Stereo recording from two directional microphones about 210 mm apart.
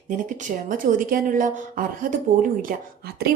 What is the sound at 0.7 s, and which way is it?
A woman's voice, 40° right (ahead or behind).